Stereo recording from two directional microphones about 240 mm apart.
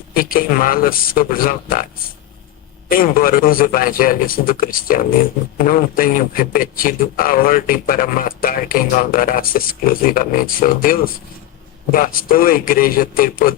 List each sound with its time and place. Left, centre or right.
0.1 s a man's voice: left
2.9 s a man's voice: left